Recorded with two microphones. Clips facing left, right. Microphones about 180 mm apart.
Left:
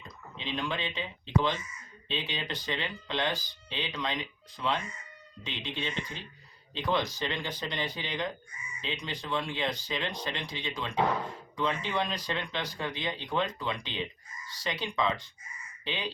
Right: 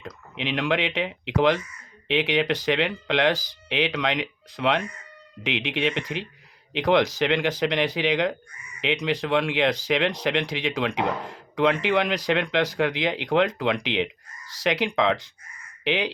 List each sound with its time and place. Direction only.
0.0 s speech: 90° right